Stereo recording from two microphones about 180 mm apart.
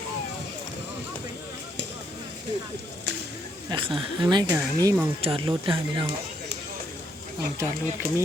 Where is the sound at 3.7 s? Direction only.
30° right (ahead or behind).